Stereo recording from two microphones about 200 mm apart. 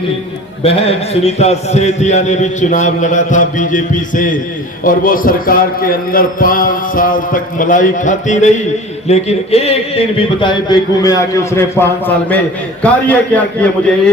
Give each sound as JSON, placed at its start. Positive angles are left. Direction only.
{"t": 0.6, "sound": "a man's voice", "side_deg": 30}